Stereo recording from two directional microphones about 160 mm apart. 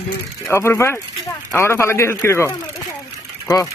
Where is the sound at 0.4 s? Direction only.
15° left (ahead or behind).